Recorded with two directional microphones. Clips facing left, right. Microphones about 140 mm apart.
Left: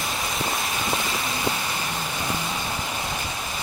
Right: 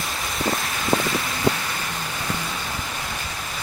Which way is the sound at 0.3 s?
25° left (ahead or behind).